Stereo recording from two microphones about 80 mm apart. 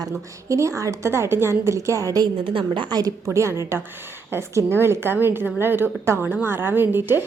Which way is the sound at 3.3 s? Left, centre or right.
Right.